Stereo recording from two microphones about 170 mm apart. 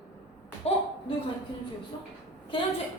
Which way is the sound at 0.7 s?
35° left (ahead or behind).